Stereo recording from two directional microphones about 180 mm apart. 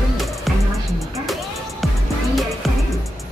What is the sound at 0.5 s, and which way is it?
Music, centre (ahead or behind).